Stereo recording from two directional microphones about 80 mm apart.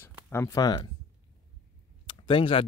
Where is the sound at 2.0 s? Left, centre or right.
Left.